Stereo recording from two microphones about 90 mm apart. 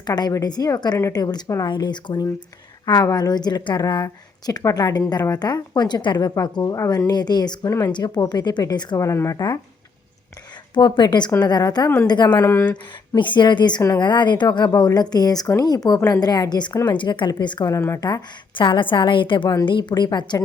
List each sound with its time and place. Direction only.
0.0 s speech: 50° left (ahead or behind)
1.6 s a woman's voice: 55° left (ahead or behind)
7.7 s speech: 35° left (ahead or behind)
7.9 s a woman's voice: 55° left (ahead or behind)
9.0 s speech: 35° left (ahead or behind)
10.8 s a woman's voice: 55° left (ahead or behind)
12.4 s speech: 30° left (ahead or behind)
13.1 s a woman's voice: 60° left (ahead or behind)
17.7 s speech: 35° left (ahead or behind)
18.0 s a woman's voice: 55° left (ahead or behind)
19.9 s a woman's voice: 50° left (ahead or behind)